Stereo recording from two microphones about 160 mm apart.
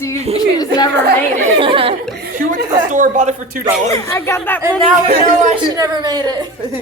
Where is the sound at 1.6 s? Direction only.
35° right (ahead or behind).